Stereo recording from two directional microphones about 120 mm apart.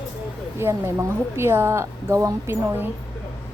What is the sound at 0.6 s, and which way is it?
A woman's voice, 20° right (ahead or behind).